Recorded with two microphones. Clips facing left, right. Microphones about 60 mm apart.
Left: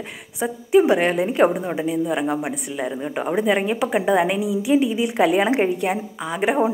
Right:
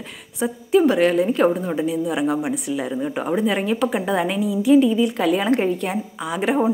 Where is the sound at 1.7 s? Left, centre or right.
Centre.